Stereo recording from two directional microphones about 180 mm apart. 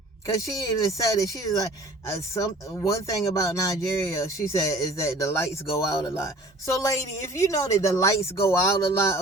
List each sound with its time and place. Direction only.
0.6 s speech: 20° left (ahead or behind)